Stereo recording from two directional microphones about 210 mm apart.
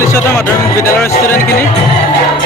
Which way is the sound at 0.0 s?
10° left (ahead or behind).